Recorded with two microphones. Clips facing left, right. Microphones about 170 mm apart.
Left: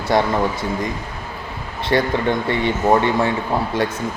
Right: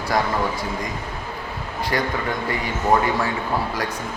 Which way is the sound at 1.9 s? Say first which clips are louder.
Left 6 dB; 25° left (ahead or behind).